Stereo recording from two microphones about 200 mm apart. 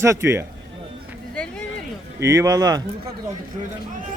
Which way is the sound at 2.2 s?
15° right (ahead or behind).